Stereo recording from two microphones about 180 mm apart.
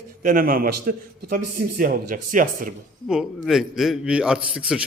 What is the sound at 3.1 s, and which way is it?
A man's voice, centre (ahead or behind).